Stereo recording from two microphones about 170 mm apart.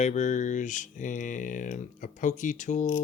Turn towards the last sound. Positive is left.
turn(degrees=45)  # may be behind; listen again after turning